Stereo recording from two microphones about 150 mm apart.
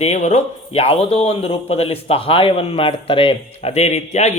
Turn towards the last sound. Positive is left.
turn(degrees=50)  # may be behind; listen again after turning